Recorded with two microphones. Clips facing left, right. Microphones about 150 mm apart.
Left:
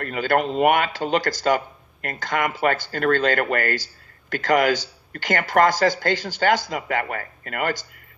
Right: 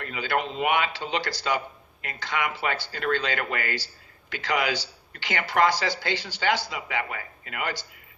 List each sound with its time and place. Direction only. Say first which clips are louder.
0.0 s speech: left 6 dB; 50° left (ahead or behind)